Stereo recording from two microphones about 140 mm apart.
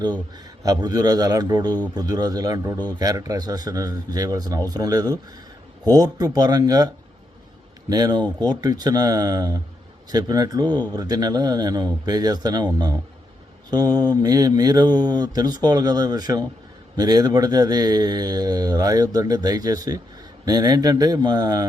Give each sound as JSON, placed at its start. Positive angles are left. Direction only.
{"t": 0.3, "sound": "a man's voice", "side_deg": -30}